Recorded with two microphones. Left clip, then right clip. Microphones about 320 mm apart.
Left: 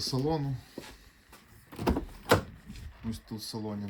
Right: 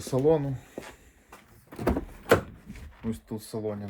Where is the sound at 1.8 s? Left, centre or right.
Centre.